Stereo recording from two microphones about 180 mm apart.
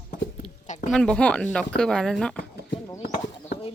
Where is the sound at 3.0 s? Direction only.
55° left (ahead or behind).